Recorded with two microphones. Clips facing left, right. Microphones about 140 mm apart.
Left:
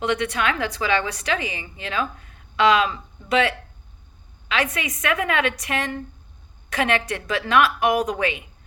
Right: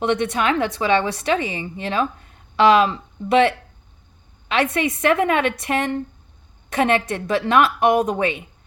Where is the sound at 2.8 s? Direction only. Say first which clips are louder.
Right 5 dB; 30° right (ahead or behind).